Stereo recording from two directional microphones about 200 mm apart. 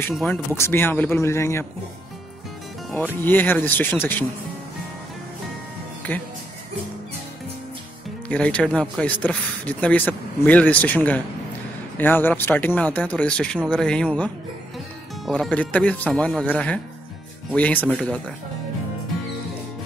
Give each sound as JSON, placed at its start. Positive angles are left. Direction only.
{"t": 0.1, "sound": "speech", "side_deg": 0}
{"t": 0.5, "sound": "speech", "side_deg": 10}
{"t": 3.3, "sound": "speech", "side_deg": 10}
{"t": 6.1, "sound": "speech", "side_deg": 10}
{"t": 8.3, "sound": "speech", "side_deg": 5}